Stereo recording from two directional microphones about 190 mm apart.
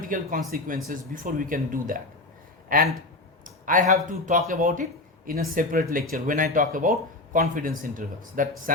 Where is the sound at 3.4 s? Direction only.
45° right (ahead or behind).